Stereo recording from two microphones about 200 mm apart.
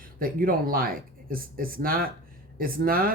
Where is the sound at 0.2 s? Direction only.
45° right (ahead or behind).